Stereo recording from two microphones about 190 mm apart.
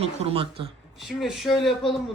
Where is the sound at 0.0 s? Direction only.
30° right (ahead or behind).